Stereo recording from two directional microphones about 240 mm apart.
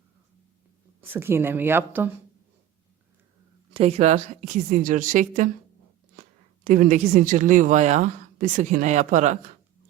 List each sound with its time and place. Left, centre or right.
1.0 s a woman's voice: centre
3.8 s a woman's voice: right
6.7 s a woman's voice: right